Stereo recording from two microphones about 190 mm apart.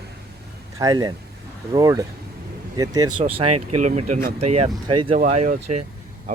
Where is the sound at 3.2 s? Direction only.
35° right (ahead or behind).